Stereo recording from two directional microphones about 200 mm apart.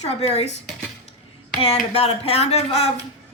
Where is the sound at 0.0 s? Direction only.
30° left (ahead or behind).